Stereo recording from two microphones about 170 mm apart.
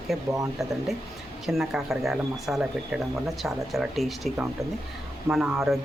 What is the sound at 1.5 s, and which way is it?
Speech, 5° right (ahead or behind).